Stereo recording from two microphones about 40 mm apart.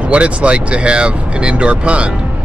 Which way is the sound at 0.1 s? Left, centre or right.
Right.